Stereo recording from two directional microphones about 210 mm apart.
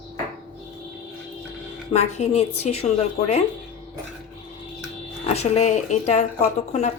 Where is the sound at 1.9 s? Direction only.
30° left (ahead or behind).